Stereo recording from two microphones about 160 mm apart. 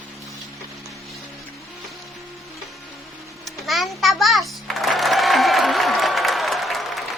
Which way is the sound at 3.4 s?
Centre (ahead or behind).